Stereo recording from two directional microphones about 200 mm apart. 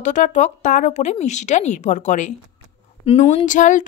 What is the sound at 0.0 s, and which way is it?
Speech, 40° left (ahead or behind).